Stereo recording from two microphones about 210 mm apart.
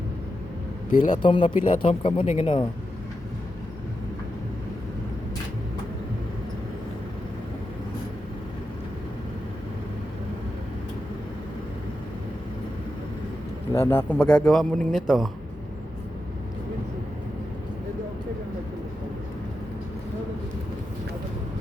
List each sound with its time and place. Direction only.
0.9 s a man's voice: 40° left (ahead or behind)
1.2 s speech: 25° left (ahead or behind)
13.7 s a man's voice: 10° left (ahead or behind)